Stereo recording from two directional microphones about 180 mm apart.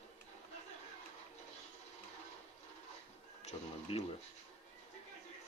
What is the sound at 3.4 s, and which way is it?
Neigh, 35° left (ahead or behind).